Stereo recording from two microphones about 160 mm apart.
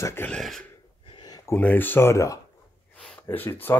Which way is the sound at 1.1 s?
25° left (ahead or behind).